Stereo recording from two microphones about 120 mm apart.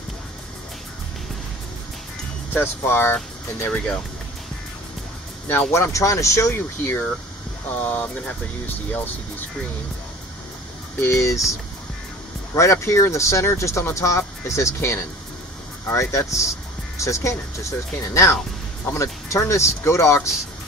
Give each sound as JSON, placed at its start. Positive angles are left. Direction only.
{"t": 2.5, "sound": "speech", "side_deg": 20}
{"t": 3.1, "sound": "speech", "side_deg": 5}
{"t": 5.7, "sound": "speech", "side_deg": 25}
{"t": 11.0, "sound": "speech", "side_deg": 25}
{"t": 12.5, "sound": "speech", "side_deg": 25}